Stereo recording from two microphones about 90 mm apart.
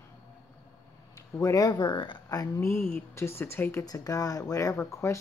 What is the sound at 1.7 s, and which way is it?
Speech, 55° left (ahead or behind).